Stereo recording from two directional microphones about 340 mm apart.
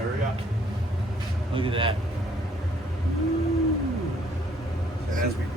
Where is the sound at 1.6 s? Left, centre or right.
Centre.